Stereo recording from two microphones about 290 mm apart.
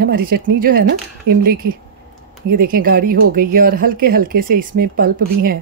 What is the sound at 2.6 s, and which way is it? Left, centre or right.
Speech, right.